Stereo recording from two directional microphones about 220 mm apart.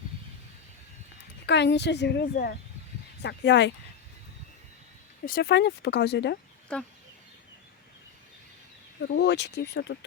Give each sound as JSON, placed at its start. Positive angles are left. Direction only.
{"t": 1.5, "sound": "speech", "side_deg": 50}
{"t": 5.2, "sound": "speech", "side_deg": 45}
{"t": 6.7, "sound": "speech", "side_deg": 5}
{"t": 9.0, "sound": "speech", "side_deg": 50}